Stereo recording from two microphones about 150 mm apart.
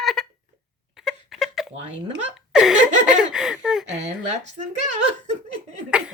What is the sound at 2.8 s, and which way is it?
Speech, 55° right (ahead or behind).